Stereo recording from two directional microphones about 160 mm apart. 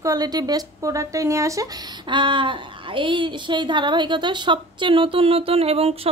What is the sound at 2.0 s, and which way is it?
Speech, 30° right (ahead or behind).